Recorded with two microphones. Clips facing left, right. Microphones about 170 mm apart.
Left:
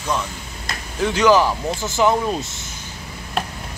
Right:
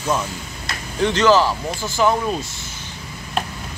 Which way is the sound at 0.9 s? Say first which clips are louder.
Even; 5° left (ahead or behind).